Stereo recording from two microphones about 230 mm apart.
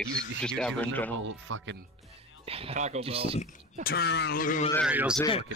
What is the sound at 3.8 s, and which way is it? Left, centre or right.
Speech, left.